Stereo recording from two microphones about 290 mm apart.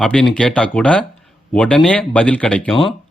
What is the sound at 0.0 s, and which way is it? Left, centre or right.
Speech, centre.